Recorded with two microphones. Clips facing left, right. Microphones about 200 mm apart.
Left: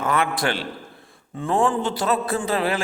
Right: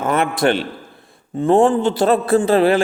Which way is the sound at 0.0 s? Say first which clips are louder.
Right 6 dB; 25° right (ahead or behind).